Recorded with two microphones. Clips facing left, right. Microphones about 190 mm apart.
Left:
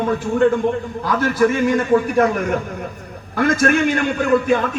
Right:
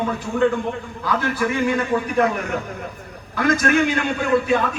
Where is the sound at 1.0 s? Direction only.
45° left (ahead or behind).